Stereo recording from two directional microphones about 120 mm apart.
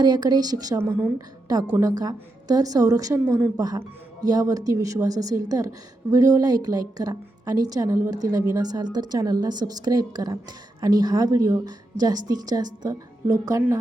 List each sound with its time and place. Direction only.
0.0 s speech: 35° right (ahead or behind)
1.8 s a woman's voice: 30° right (ahead or behind)